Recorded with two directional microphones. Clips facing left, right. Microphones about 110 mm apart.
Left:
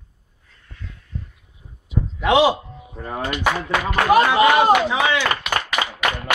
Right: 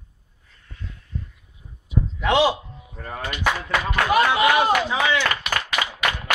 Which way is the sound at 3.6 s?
10° left (ahead or behind).